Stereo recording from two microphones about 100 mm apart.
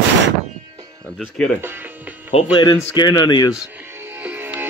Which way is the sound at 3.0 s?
45° left (ahead or behind).